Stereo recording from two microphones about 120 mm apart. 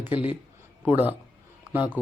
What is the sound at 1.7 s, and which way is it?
Speech, 15° right (ahead or behind).